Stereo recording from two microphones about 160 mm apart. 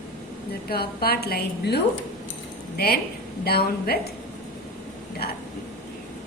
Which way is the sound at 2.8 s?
75° left (ahead or behind).